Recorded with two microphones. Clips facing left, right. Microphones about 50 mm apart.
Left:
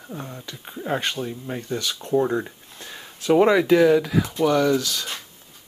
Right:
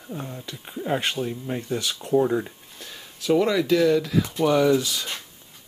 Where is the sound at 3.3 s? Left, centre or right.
Left.